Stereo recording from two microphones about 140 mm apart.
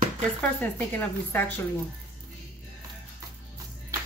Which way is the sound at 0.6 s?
15° left (ahead or behind).